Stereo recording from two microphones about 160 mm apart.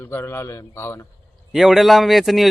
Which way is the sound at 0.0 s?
15° left (ahead or behind).